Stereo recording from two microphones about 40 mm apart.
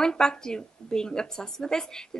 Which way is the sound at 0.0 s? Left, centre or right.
Centre.